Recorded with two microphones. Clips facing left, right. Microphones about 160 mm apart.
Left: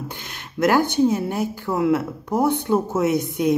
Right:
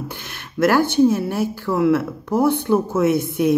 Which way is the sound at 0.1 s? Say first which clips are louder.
Right 2 dB; 15° left (ahead or behind).